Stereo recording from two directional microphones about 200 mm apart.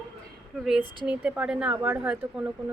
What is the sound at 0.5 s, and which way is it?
A woman's voice, centre (ahead or behind).